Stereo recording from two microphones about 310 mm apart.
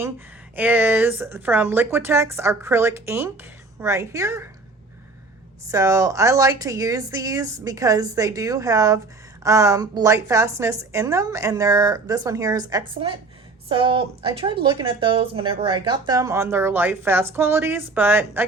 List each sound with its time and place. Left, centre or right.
0.5 s speech: centre
5.7 s speech: centre